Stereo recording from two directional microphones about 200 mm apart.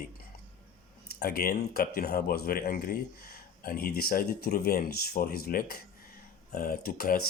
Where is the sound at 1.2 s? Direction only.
50° left (ahead or behind).